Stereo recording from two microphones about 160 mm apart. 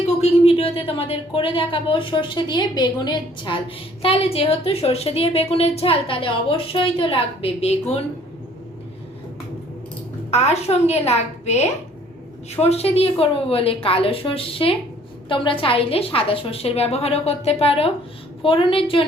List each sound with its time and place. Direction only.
0.0 s a woman's voice: 40° left (ahead or behind)
10.3 s a woman's voice: 40° left (ahead or behind)